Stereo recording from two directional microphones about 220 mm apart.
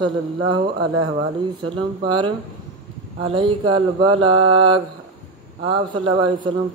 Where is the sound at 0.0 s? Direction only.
20° right (ahead or behind).